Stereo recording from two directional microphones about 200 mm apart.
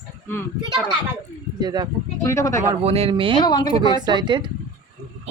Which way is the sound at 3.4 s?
20° left (ahead or behind).